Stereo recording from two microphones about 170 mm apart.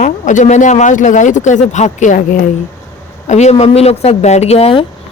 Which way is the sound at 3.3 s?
40° left (ahead or behind).